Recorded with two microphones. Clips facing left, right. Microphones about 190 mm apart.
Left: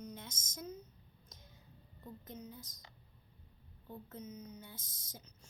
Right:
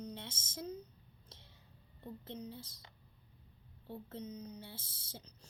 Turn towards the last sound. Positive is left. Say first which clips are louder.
# right 3 dB
turn(degrees=-30)  # may be behind; listen again after turning